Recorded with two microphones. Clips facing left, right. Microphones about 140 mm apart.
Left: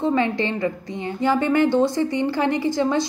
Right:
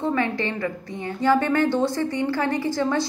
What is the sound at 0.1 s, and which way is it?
A woman's voice, 20° left (ahead or behind).